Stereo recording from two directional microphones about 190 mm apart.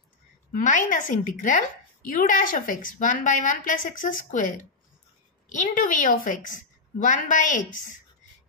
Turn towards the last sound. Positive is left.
turn(degrees=45)  # may be behind; listen again after turning